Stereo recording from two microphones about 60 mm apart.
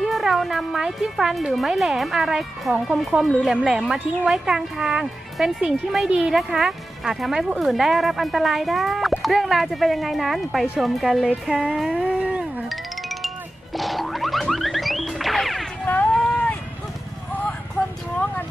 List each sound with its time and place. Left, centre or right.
0.0 s music: centre
0.7 s speech: centre
11.9 s music: centre
12.6 s music: centre
16.2 s a sound: centre